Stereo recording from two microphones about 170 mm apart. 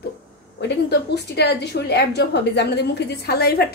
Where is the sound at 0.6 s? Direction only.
85° left.